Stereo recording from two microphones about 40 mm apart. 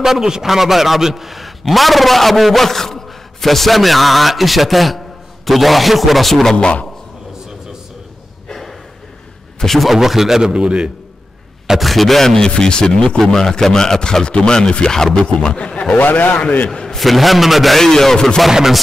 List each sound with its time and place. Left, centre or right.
0.0 s a man's voice: centre
6.4 s speech: left
9.6 s a man's voice: centre
9.9 s a man's voice: centre
10.5 s a man's voice: right
11.8 s a man's voice: centre
12.4 s a man's voice: left
15.2 s speech: left
16.0 s a man's voice: left
16.6 s a sound: left
16.9 s a man's voice: centre
17.7 s a man's voice: centre